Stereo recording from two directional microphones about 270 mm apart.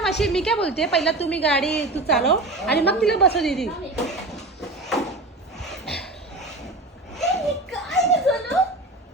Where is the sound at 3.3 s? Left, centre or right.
Centre.